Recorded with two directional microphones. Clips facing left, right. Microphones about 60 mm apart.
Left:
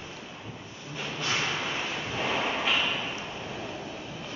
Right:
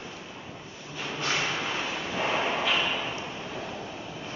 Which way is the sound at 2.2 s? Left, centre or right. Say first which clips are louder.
Right 2 dB; centre.